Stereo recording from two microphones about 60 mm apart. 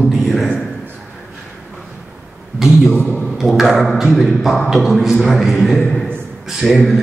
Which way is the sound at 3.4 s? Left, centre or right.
Centre.